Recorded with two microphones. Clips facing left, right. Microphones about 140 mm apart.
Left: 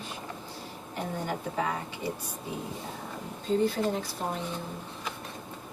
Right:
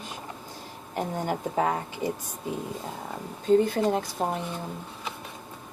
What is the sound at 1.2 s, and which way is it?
Speech, 50° right (ahead or behind).